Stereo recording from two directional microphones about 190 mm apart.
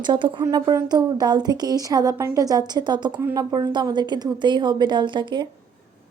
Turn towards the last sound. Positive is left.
turn(degrees=-25)  # may be behind; listen again after turning